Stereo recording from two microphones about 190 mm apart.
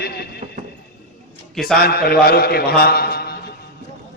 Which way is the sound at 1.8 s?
55° left (ahead or behind).